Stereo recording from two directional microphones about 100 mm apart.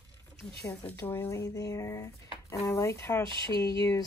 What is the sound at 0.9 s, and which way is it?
Speech, 20° left (ahead or behind).